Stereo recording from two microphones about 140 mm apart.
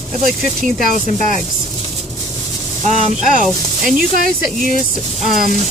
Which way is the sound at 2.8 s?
50° right (ahead or behind).